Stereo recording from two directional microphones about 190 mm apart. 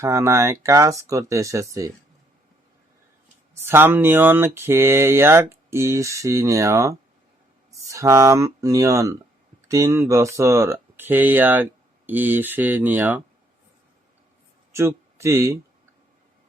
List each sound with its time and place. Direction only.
0.0 s speech: 15° right (ahead or behind)
3.5 s speech: 10° right (ahead or behind)
14.7 s speech: 15° right (ahead or behind)